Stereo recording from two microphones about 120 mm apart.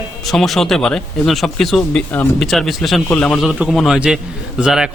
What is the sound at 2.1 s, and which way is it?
Speech, 15° left (ahead or behind).